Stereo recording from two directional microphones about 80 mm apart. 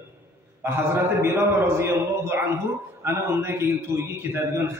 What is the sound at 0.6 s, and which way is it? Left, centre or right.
A man's voice, right.